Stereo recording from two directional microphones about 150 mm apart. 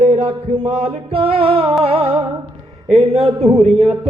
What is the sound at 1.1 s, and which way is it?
Music, 40° right (ahead or behind).